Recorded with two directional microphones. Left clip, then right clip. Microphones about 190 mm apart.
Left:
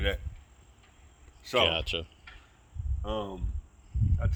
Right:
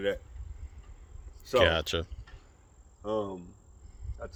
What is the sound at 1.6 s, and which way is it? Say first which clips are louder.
Speech: right 1 dB; 35° right (ahead or behind).